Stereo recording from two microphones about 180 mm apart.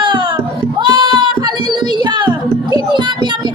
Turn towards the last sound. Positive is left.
turn(degrees=-25)  # may be behind; listen again after turning